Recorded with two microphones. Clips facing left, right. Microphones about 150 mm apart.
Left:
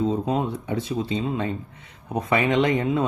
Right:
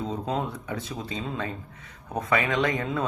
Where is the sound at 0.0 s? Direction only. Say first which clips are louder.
Left 6 dB; 25° left (ahead or behind).